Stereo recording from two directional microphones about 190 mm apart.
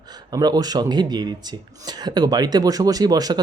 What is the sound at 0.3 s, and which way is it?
Speech, 20° right (ahead or behind).